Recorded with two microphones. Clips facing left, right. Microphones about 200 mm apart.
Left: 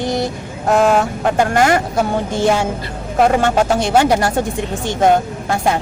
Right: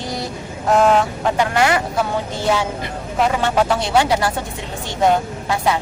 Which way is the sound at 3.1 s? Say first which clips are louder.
Left 4 dB; 50° left (ahead or behind).